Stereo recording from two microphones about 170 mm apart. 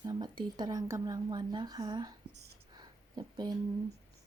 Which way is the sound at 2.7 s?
25° right (ahead or behind).